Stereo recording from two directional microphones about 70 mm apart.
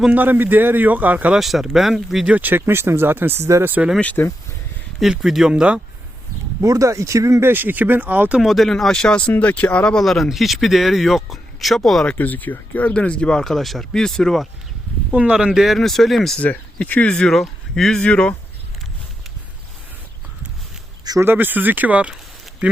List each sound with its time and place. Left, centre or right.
0.1 s a man's voice: right
1.4 s speech: centre
2.2 s a man's voice: right
4.0 s speech: left
5.2 s speech: centre
6.6 s speech: right
7.4 s a man's voice: right
8.4 s speech: centre; by 9.8 s left
9.8 s speech: centre
12.0 s speech: left; by 14.4 s centre
15.1 s speech: centre
16.8 s speech: left
17.3 s speech: centre
21.2 s a man's voice: right